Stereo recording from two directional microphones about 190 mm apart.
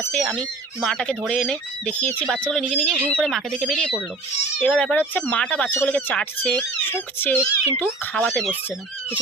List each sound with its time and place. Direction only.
0.0 s speech: 5° left (ahead or behind)